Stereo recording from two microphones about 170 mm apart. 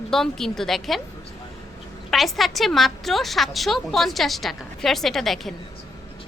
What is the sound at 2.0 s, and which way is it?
A woman's voice, centre (ahead or behind).